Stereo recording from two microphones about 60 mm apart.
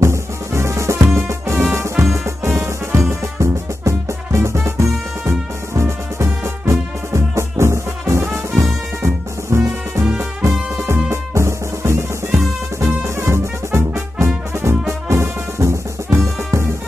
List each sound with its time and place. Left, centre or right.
0.0 s music: right
14.2 s brass instrument: right